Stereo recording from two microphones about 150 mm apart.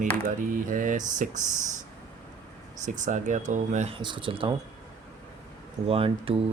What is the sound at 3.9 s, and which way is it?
Speech, 35° right (ahead or behind).